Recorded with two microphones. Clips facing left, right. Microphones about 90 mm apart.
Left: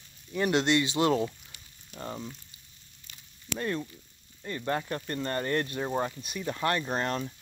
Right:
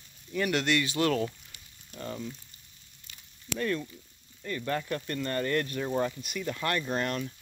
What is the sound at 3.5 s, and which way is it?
Speech, 25° left (ahead or behind).